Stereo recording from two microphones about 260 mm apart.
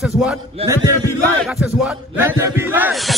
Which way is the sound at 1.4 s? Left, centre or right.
Centre.